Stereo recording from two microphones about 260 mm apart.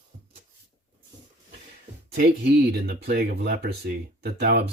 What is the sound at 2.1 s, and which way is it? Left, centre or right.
Speech, right.